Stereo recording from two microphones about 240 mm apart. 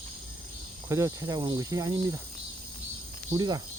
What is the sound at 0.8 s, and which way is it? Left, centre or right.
Speech, centre.